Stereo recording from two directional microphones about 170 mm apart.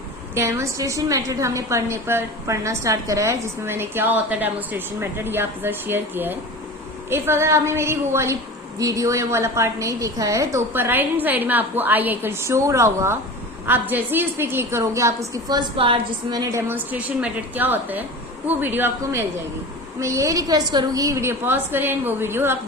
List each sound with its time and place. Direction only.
0.3 s a woman's voice: 15° right (ahead or behind)